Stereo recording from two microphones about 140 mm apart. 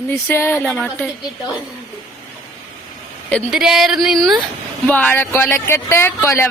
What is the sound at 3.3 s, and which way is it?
Speech, 5° right (ahead or behind).